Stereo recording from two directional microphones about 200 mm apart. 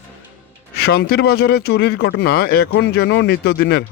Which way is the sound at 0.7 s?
50° left (ahead or behind).